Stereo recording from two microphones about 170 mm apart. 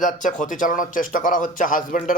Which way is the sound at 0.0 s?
50° left (ahead or behind).